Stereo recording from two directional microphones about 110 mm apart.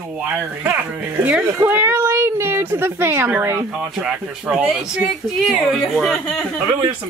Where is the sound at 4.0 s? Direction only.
10° right (ahead or behind); by 6.6 s 10° left (ahead or behind).